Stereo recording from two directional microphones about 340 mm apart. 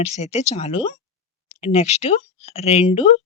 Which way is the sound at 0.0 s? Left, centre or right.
Centre.